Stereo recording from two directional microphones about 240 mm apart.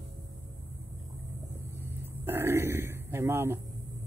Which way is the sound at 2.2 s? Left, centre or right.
Centre.